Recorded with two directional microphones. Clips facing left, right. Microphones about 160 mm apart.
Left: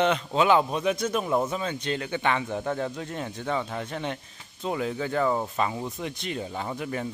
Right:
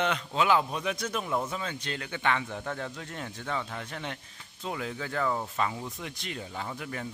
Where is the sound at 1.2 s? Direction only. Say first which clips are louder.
Left 4 dB; 35° left (ahead or behind).